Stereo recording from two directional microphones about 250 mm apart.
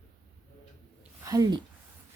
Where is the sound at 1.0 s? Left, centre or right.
Centre.